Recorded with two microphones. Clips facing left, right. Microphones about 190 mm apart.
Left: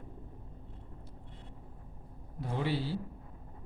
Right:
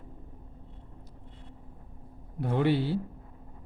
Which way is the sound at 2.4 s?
60° right (ahead or behind).